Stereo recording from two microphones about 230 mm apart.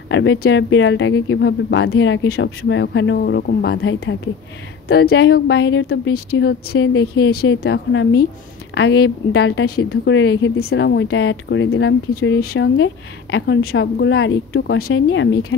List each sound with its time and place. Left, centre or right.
0.1 s speech: left
6.4 s speech: left
9.8 s speech: left
12.1 s a woman's voice: left